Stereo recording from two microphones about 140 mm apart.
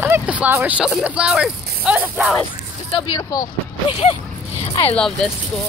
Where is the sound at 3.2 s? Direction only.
25° left (ahead or behind).